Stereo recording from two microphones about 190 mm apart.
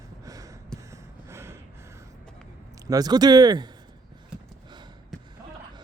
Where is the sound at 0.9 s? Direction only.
15° right (ahead or behind).